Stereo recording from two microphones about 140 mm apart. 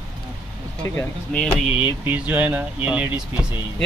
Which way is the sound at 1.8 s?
10° right (ahead or behind).